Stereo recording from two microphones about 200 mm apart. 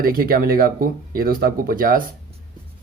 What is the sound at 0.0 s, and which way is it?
Speech, 45° right (ahead or behind).